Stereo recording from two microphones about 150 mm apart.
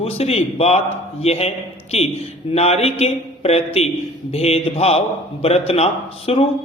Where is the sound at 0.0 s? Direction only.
40° left (ahead or behind).